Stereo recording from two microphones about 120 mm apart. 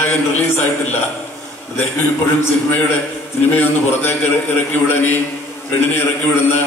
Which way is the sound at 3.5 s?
15° left (ahead or behind).